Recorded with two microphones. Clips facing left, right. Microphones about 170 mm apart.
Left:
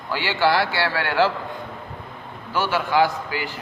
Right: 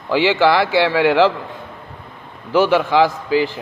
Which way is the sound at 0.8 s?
90° right.